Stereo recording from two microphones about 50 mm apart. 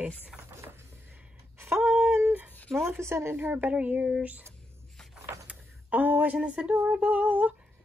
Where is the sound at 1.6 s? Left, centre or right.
Right.